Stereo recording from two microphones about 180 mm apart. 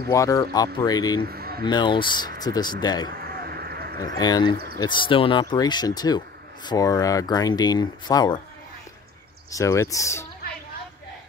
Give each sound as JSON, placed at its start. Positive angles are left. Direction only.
{"t": 0.1, "sound": "speech", "side_deg": 20}
{"t": 1.2, "sound": "a sound", "side_deg": -60}
{"t": 1.6, "sound": "speech", "side_deg": 25}
{"t": 3.1, "sound": "a sound", "side_deg": -60}
{"t": 4.2, "sound": "speech", "side_deg": 25}
{"t": 9.5, "sound": "speech", "side_deg": 15}